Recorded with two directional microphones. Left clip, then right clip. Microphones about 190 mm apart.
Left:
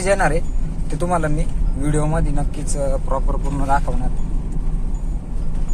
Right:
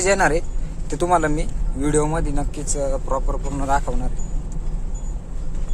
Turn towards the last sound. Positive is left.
turn(degrees=-20)  # may be behind; listen again after turning